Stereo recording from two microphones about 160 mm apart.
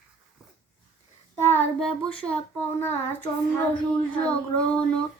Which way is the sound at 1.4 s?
15° left (ahead or behind).